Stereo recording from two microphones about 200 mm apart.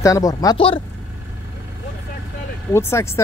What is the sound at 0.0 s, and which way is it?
Speech, 15° left (ahead or behind).